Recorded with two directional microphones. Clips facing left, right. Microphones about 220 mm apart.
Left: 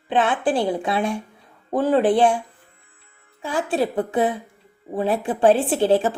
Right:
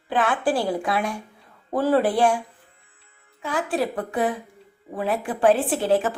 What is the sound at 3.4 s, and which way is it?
A woman's voice, 25° left (ahead or behind).